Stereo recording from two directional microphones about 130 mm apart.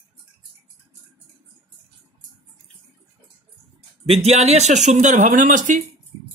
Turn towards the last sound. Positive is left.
turn(degrees=-90)